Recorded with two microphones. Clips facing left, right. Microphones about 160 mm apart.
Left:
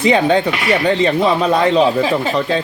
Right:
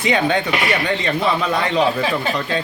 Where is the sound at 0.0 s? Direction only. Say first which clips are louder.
Left 5 dB; 30° left (ahead or behind).